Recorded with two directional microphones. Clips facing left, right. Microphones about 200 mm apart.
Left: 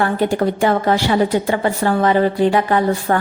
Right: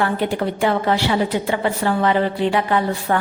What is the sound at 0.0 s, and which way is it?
A woman's voice, 45° left (ahead or behind).